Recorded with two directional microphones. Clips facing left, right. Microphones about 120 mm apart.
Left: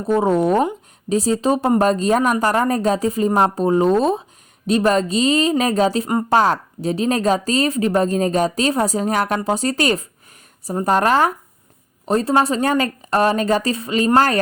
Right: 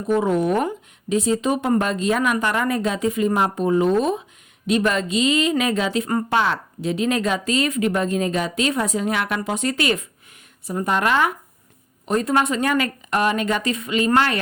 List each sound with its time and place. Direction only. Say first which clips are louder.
0.0 s a woman's voice: left 3 dB; 35° left (ahead or behind)